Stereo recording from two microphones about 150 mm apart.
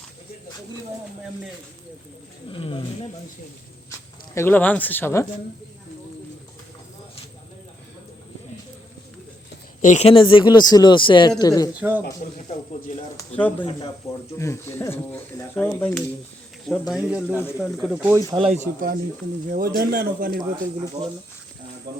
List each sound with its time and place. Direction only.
2.5 s speech: 35° left (ahead or behind)
4.4 s speech: 15° left (ahead or behind)
9.8 s speech: 50° left (ahead or behind); by 11.7 s 25° left (ahead or behind)
11.7 s speech: 10° right (ahead or behind)
12.2 s speech: 60° left (ahead or behind)
13.3 s speech: 10° left (ahead or behind)
16.9 s speech: 5° right (ahead or behind)
18.3 s speech: 40° right (ahead or behind)
19.5 s a man's voice: 75° right (ahead or behind)
20.4 s speech: 35° right (ahead or behind)